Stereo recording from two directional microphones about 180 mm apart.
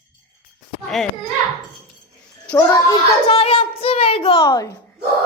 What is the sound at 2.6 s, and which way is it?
Speech, 20° left (ahead or behind).